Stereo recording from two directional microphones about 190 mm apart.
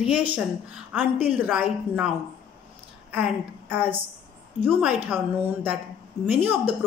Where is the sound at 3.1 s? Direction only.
5° right (ahead or behind).